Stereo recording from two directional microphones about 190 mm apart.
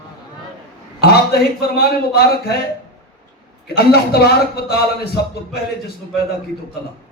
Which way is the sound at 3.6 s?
55° left (ahead or behind).